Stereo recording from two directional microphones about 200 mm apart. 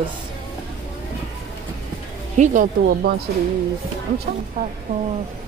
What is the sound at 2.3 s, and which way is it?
Speech, 40° right (ahead or behind).